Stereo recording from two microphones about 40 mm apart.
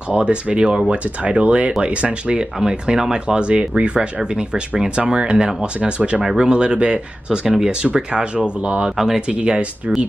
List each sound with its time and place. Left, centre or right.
0.1 s speech: right
8.9 s speech: centre
9.3 s speech: right